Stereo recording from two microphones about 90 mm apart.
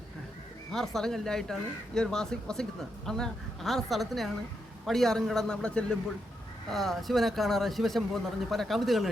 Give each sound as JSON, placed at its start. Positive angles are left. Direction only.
{"t": 0.7, "sound": "speech", "side_deg": 5}